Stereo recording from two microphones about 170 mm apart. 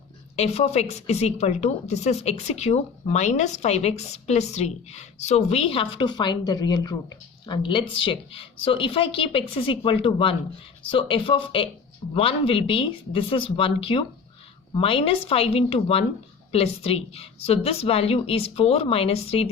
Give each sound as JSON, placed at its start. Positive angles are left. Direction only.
{"t": 0.3, "sound": "a woman's voice", "side_deg": 40}